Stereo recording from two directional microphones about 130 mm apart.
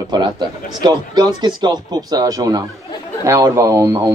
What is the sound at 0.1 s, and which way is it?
Speech, 35° right (ahead or behind).